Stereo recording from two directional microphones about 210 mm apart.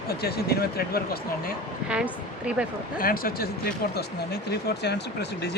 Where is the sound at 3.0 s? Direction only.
45° left (ahead or behind).